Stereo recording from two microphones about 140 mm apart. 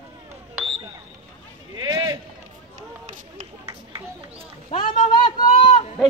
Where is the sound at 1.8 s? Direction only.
30° right (ahead or behind).